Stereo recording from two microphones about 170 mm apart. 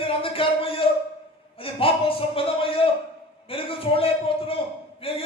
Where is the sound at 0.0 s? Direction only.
30° left (ahead or behind).